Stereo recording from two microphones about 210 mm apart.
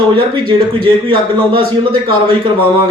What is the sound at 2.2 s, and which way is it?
Speech, 25° right (ahead or behind).